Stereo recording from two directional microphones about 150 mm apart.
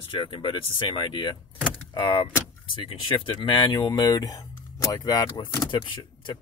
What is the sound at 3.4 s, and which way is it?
Speech, 30° left (ahead or behind).